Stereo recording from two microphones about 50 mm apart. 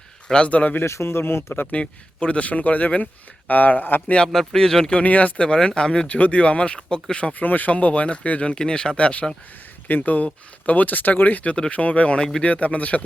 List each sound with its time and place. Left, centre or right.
0.3 s speech: centre
0.5 s speech: left
0.9 s speech: left
2.2 s speech: left
4.3 s speech: centre
4.9 s speech: left
6.1 s speech: left
7.3 s speech: left